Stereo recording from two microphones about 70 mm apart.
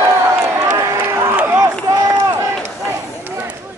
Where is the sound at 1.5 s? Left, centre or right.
Right.